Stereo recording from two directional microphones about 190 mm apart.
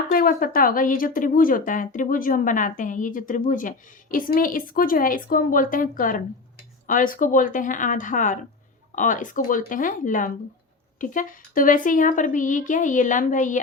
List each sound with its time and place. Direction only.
0.1 s speech: 50° left (ahead or behind)